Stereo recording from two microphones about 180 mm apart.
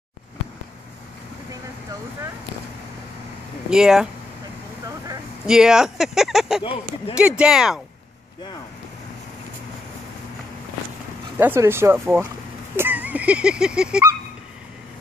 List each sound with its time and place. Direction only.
3.7 s speech: 5° right (ahead or behind)
5.5 s speech: 5° right (ahead or behind)
6.6 s speech: 30° left (ahead or behind)
7.2 s speech: 5° right (ahead or behind)
11.3 s speech: 15° right (ahead or behind)